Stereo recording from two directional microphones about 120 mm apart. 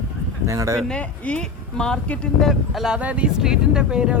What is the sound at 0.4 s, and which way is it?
Speech, 25° right (ahead or behind).